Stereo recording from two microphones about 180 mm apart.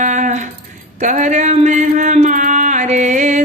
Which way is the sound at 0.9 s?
40° right (ahead or behind).